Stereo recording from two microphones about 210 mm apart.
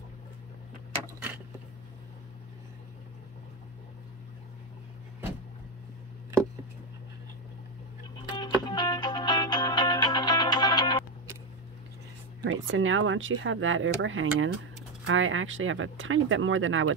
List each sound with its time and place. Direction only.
8.4 s music: 20° left (ahead or behind)
12.4 s speech: 65° right (ahead or behind)